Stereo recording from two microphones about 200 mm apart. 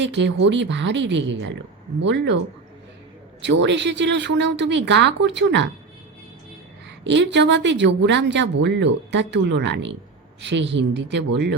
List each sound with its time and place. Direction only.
0.0 s speech: 60° right (ahead or behind)
3.4 s speech: 65° right (ahead or behind)
7.0 s speech: 60° right (ahead or behind)